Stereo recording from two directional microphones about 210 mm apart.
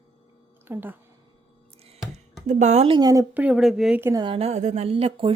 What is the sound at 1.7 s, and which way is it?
Music, 30° right (ahead or behind).